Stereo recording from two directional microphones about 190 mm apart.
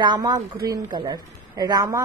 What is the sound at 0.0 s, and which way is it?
Speech, 20° right (ahead or behind).